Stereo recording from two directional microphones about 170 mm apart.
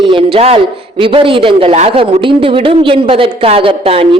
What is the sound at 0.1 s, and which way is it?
A man's voice, 30° right (ahead or behind).